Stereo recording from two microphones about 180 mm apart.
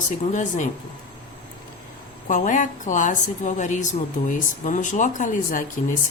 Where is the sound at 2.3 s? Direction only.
45° left (ahead or behind).